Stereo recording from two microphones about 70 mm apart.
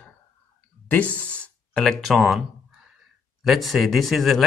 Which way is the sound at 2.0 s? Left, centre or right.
Centre.